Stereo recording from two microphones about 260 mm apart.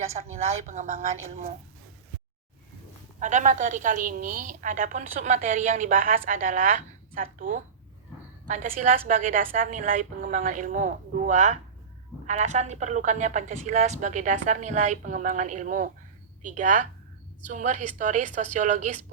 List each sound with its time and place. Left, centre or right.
0.3 s a woman's voice: right
3.2 s a woman's voice: right